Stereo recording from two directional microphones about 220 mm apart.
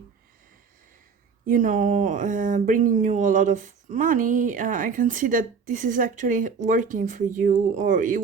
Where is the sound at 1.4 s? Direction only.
35° right (ahead or behind).